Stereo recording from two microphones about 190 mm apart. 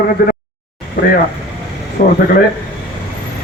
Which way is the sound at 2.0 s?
45° left (ahead or behind).